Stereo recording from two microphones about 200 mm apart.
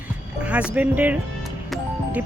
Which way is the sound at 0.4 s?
5° right (ahead or behind).